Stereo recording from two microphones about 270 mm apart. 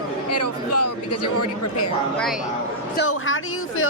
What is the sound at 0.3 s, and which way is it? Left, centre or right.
Speech, left.